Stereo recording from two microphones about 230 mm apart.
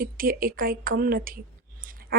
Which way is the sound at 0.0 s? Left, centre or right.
Right.